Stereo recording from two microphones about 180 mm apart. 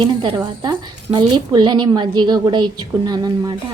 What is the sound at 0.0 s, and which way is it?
A woman's voice, 25° right (ahead or behind).